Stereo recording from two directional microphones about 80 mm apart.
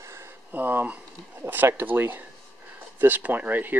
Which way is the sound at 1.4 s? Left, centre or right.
Right.